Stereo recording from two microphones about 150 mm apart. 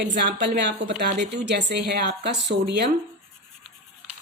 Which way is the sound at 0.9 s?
75° right (ahead or behind).